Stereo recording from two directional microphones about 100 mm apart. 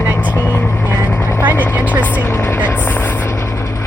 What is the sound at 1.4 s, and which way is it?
Vehicle, 20° right (ahead or behind).